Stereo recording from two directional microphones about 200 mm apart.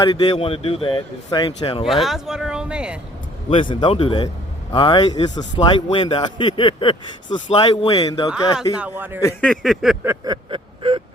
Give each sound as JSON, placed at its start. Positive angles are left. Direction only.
{"t": 0.0, "sound": "a man's voice", "side_deg": 20}
{"t": 1.8, "sound": "speech", "side_deg": 0}
{"t": 3.5, "sound": "a man's voice", "side_deg": 25}
{"t": 8.8, "sound": "a man's voice", "side_deg": -10}
{"t": 9.2, "sound": "speech", "side_deg": 5}
{"t": 10.0, "sound": "a man's voice", "side_deg": -10}
{"t": 10.5, "sound": "whimper", "side_deg": -25}